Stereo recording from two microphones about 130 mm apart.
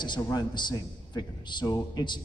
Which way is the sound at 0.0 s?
35° left (ahead or behind).